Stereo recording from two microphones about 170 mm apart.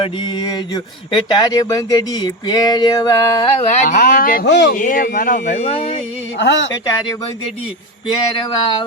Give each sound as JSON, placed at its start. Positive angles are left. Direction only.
{"t": 0.0, "sound": "speech", "side_deg": 25}
{"t": 3.7, "sound": "speech", "side_deg": 40}
{"t": 3.9, "sound": "speech", "side_deg": 60}
{"t": 4.7, "sound": "speech", "side_deg": 50}
{"t": 6.4, "sound": "speech", "side_deg": 90}
{"t": 8.0, "sound": "speech", "side_deg": 30}